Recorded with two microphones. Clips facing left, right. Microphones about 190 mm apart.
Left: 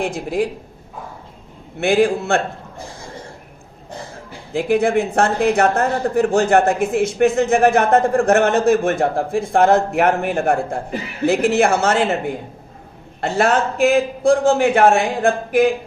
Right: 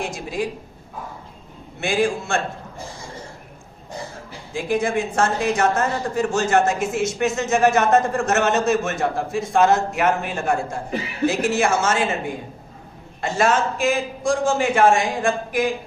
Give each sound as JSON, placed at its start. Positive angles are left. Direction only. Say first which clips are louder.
{"t": 0.0, "sound": "speech", "louder": "left 5 dB", "side_deg": 60}
{"t": 1.8, "sound": "speech", "louder": "left 6 dB", "side_deg": 60}
{"t": 4.5, "sound": "speech", "louder": "left 5 dB", "side_deg": 60}
{"t": 13.2, "sound": "speech", "louder": "left 3 dB", "side_deg": 60}